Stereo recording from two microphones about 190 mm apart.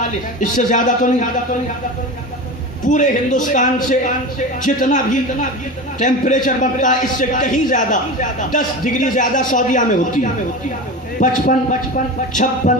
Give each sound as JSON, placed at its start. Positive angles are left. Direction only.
{"t": 0.3, "sound": "speech", "side_deg": 40}
{"t": 2.8, "sound": "a man's voice", "side_deg": 40}
{"t": 11.2, "sound": "a man's voice", "side_deg": 40}